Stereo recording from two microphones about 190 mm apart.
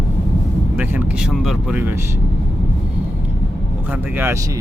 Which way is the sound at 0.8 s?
5° right (ahead or behind).